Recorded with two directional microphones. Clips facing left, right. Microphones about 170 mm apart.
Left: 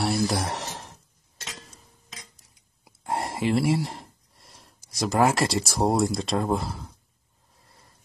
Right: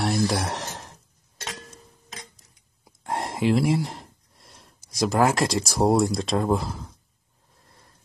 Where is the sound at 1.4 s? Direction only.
55° right (ahead or behind).